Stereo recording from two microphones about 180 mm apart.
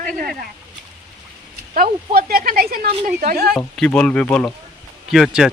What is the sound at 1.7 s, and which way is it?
Speech, 55° right (ahead or behind).